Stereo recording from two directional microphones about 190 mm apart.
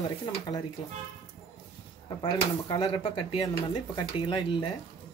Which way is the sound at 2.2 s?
20° left (ahead or behind).